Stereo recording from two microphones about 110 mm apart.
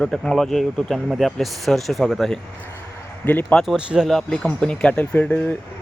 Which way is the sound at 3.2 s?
15° left (ahead or behind).